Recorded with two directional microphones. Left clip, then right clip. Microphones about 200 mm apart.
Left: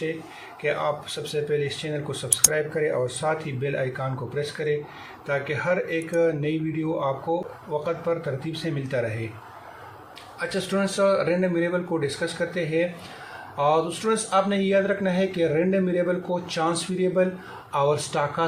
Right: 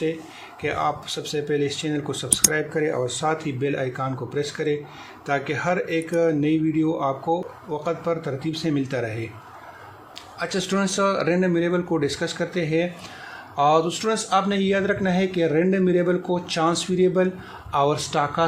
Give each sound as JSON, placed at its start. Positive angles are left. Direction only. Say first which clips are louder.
{"t": 0.6, "sound": "speech", "louder": "right 1 dB", "side_deg": -50}
{"t": 10.4, "sound": "speech", "louder": "right 1 dB", "side_deg": -50}